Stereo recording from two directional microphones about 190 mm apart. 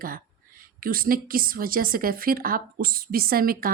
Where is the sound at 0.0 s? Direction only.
50° right (ahead or behind).